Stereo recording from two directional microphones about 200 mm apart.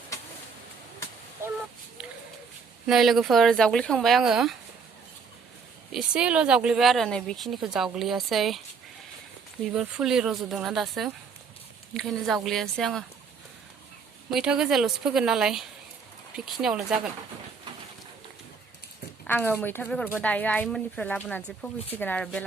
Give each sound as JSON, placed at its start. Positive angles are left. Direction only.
{"t": 1.4, "sound": "a sound", "side_deg": -15}
{"t": 2.8, "sound": "speech", "side_deg": 0}
{"t": 5.9, "sound": "speech", "side_deg": -5}
{"t": 9.7, "sound": "speech", "side_deg": 0}
{"t": 14.3, "sound": "speech", "side_deg": -5}
{"t": 19.3, "sound": "speech", "side_deg": 10}